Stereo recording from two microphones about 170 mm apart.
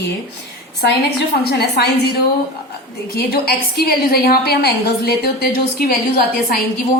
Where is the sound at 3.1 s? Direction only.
65° left (ahead or behind).